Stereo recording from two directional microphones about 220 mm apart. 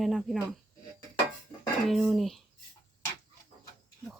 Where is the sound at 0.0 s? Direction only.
Centre (ahead or behind).